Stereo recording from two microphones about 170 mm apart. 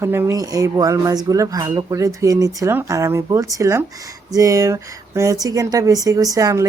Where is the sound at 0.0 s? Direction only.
15° right (ahead or behind).